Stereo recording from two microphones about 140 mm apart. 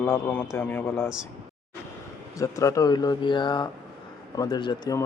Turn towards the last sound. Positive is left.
turn(degrees=25)  # may be behind; listen again after turning